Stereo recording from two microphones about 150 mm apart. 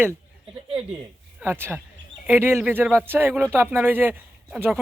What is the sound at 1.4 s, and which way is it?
Speech, 15° right (ahead or behind).